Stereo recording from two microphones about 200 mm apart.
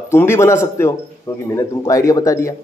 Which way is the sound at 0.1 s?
15° left (ahead or behind).